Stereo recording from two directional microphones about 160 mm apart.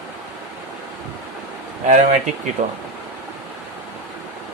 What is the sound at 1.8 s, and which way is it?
Speech, 50° right (ahead or behind).